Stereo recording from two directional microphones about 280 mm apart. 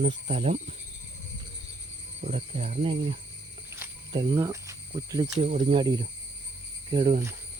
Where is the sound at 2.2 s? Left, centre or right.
Right.